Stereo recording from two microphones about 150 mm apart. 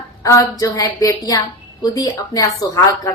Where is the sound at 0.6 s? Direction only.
25° left (ahead or behind).